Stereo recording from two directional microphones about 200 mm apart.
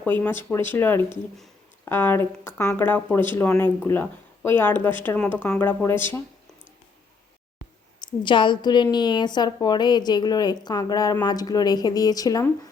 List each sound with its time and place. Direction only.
0.0 s speech: 10° left (ahead or behind)
8.2 s a woman's voice: 25° left (ahead or behind)